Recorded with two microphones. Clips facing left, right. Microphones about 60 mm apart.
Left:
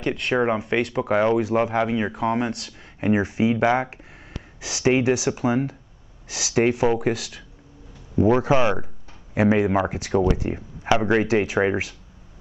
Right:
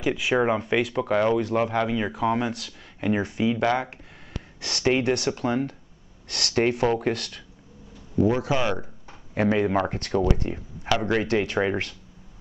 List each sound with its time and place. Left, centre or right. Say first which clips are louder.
0.0 s speech: left 1 dB; centre
1.0 s speech: left 2 dB; centre
3.0 s speech: left 4 dB; centre
4.6 s speech: left 3 dB; centre
8.2 s speech: left 4 dB; left
9.3 s speech: left 3 dB; centre